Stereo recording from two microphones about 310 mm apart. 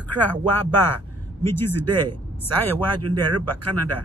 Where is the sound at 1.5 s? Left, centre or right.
Right.